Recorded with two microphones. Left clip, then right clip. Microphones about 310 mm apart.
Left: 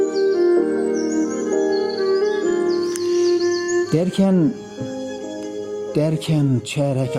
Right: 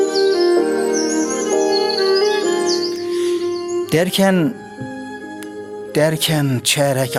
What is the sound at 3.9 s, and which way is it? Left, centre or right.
Speech, right.